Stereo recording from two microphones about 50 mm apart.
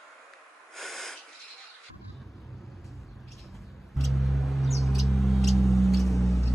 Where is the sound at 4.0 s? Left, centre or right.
Centre.